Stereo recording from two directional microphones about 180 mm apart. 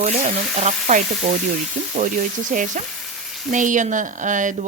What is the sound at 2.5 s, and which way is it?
Speech, 45° right (ahead or behind).